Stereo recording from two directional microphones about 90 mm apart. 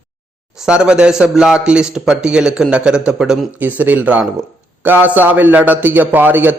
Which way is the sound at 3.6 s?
20° right (ahead or behind).